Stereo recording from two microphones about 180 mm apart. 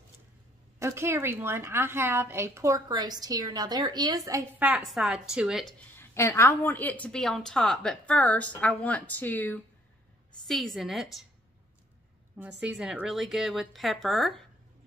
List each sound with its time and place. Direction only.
0.7 s a woman's voice: 15° right (ahead or behind)
5.9 s a woman's voice: 15° left (ahead or behind); by 11.2 s centre (ahead or behind)
12.4 s speech: 5° right (ahead or behind)